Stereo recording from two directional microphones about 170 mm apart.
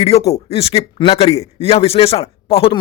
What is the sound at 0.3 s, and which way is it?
Speech, 35° left (ahead or behind).